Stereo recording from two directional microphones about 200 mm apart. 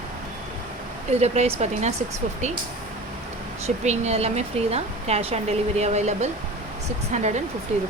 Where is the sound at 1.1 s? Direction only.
30° right (ahead or behind).